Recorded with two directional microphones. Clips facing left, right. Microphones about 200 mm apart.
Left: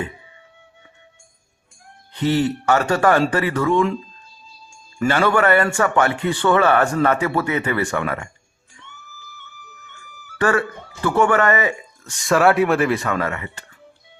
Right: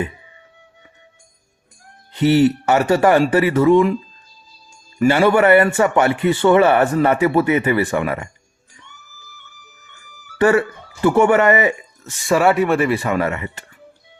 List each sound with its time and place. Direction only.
2.2 s speech: 15° right (ahead or behind)
4.9 s speech: 15° right (ahead or behind)
11.0 s speech: 20° right (ahead or behind)
12.2 s speech: centre (ahead or behind)
13.1 s speech: 20° right (ahead or behind)